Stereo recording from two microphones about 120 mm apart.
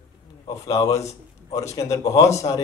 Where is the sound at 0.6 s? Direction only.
30° left (ahead or behind).